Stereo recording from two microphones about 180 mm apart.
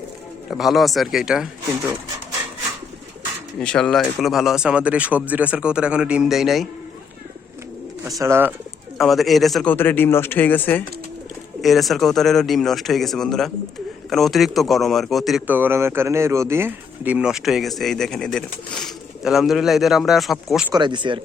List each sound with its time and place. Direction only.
0.5 s speech: centre (ahead or behind)
3.6 s speech: 5° left (ahead or behind)
8.2 s speech: 10° right (ahead or behind)
9.0 s speech: centre (ahead or behind)
9.7 s speech: 10° left (ahead or behind)
11.6 s speech: centre (ahead or behind)
20.7 s speech: 25° right (ahead or behind)